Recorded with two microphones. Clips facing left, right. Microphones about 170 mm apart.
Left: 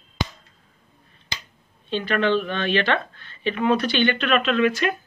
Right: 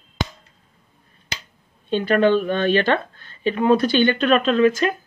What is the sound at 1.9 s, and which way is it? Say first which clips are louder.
Speech: right 5 dB; 45° right (ahead or behind).